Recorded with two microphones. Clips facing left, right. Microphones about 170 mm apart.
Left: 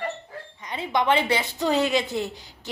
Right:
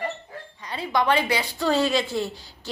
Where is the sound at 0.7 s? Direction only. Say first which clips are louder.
Even; 20° left (ahead or behind).